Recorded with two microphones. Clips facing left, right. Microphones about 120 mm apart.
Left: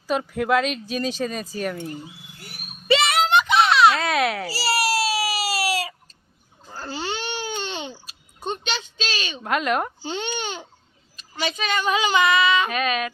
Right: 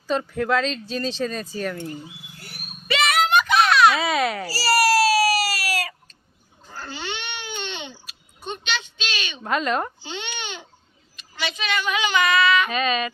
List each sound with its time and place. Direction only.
0.1 s speech: 10° left (ahead or behind)
2.8 s a sound: 30° left (ahead or behind)
3.9 s a child's voice: centre (ahead or behind)
4.5 s baby cry: 25° left (ahead or behind)
6.7 s babbling: 35° left (ahead or behind)
9.4 s a child's voice: 5° left (ahead or behind)
10.0 s babbling: 40° left (ahead or behind)
11.2 s speech: 40° left (ahead or behind)
12.7 s a child's voice: 5° left (ahead or behind)